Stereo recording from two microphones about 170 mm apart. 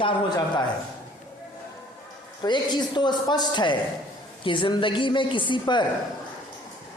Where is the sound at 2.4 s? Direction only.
25° left (ahead or behind).